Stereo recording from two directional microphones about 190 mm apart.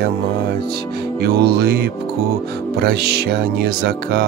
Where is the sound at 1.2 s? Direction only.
55° right (ahead or behind).